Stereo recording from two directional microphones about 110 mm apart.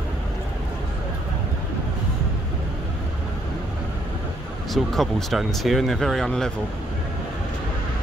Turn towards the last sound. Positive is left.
turn(degrees=5)  # may be behind; listen again after turning